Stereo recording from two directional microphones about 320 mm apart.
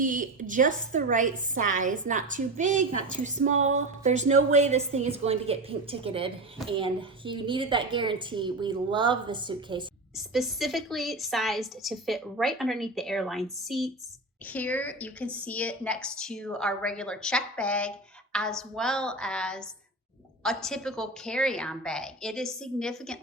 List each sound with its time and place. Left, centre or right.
0.0 s a woman's voice: right
10.2 s a woman's voice: centre